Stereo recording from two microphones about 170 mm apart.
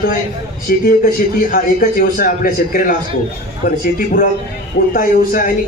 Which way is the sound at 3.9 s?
55° left (ahead or behind).